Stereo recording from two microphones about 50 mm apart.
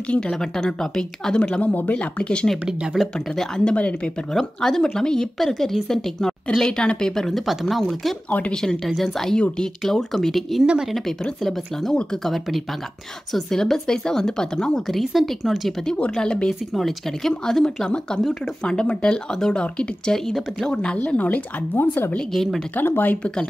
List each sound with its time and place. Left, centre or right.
0.3 s speech: centre
1.4 s speech: left
2.9 s speech: centre
3.3 s speech: centre
3.7 s speech: left
4.3 s speech: centre
8.5 s speech: centre
14.9 s speech: centre
16.2 s speech: centre
16.7 s speech: centre
17.3 s speech: centre
20.7 s a woman's voice: left
22.3 s speech: centre
22.8 s a woman's voice: left